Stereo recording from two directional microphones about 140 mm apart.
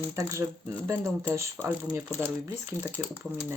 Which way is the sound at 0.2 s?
20° right (ahead or behind).